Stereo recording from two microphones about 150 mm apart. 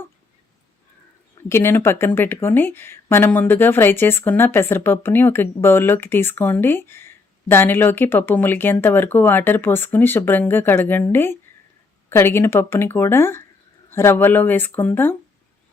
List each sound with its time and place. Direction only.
1.4 s speech: 15° left (ahead or behind)